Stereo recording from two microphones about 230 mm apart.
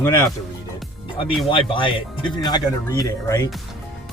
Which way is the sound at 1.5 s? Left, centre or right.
Left.